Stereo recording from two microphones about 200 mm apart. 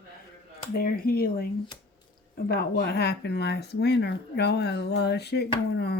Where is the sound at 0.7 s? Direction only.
50° left (ahead or behind).